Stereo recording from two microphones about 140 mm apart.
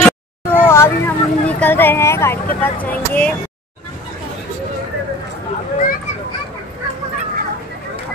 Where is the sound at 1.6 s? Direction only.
15° left (ahead or behind).